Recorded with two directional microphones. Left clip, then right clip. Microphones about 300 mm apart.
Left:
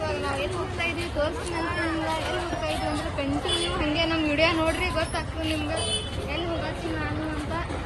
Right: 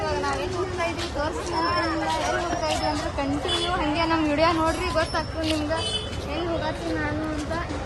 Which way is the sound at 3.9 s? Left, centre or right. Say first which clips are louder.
Even; centre.